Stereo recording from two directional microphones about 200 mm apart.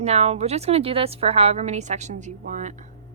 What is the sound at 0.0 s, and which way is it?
Speech, 30° right (ahead or behind).